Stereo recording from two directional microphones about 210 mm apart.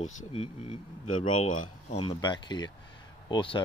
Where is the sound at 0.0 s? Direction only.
30° left (ahead or behind).